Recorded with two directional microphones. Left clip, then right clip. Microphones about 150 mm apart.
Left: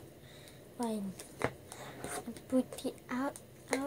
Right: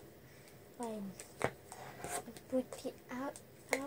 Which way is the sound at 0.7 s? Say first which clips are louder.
Left 5 dB; 60° left (ahead or behind).